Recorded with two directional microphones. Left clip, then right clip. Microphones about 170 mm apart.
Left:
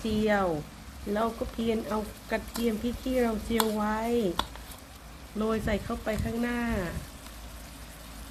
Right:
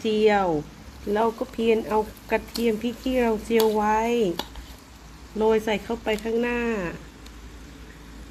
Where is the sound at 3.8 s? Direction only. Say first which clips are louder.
Right 9 dB; 20° right (ahead or behind).